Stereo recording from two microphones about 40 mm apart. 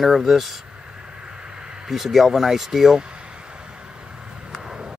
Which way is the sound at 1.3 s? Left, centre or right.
Right.